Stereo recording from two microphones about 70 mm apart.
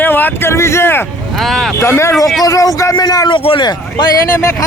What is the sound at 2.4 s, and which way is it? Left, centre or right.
Speech, left.